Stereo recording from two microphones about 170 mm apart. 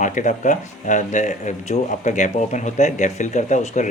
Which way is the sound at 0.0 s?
50° left (ahead or behind).